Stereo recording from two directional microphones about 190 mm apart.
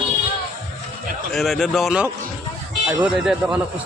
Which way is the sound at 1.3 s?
Centre (ahead or behind).